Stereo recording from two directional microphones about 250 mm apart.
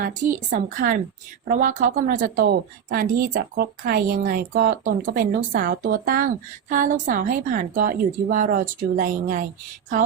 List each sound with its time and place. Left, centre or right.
0.0 s a woman's voice: right